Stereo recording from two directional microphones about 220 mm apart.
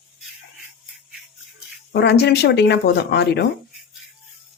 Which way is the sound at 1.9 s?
50° left (ahead or behind).